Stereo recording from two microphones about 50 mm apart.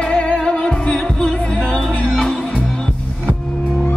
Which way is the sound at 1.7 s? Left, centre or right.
Centre.